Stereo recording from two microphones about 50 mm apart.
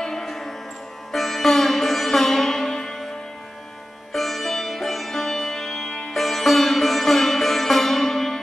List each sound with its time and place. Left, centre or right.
0.0 s music: centre
1.1 s sitar: centre
4.1 s sitar: centre
6.1 s sitar: centre